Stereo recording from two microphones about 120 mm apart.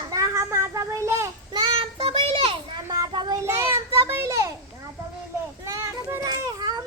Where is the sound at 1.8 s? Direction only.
50° right (ahead or behind).